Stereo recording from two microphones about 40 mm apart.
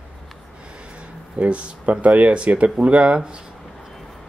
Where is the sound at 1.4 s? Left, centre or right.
Right.